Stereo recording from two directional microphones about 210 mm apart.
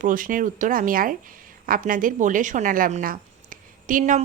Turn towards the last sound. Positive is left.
turn(degrees=-40)  # may be behind; listen again after turning